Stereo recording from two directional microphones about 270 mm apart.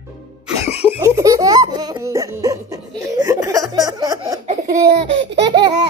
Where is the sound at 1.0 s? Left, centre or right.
Centre.